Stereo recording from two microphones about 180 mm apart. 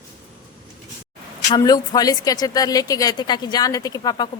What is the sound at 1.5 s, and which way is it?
A woman's voice, 20° left (ahead or behind).